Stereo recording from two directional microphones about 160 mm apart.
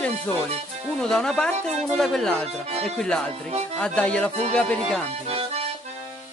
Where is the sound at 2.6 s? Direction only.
40° right (ahead or behind).